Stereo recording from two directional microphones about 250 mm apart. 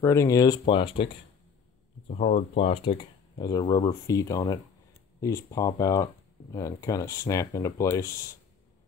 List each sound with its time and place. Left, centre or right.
0.0 s speech: centre